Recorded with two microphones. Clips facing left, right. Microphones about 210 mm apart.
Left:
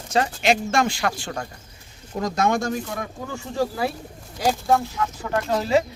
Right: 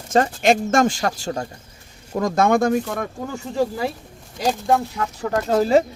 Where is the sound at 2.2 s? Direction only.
55° right (ahead or behind).